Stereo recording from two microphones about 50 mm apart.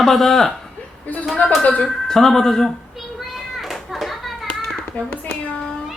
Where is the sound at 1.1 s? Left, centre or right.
Left.